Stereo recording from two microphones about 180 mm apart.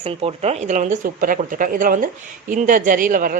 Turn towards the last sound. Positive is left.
turn(degrees=-50)  # may be behind; listen again after turning